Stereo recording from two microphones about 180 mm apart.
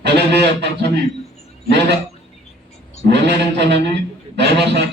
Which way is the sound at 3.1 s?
70° right (ahead or behind).